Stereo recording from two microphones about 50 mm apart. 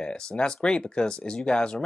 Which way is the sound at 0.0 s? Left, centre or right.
Centre.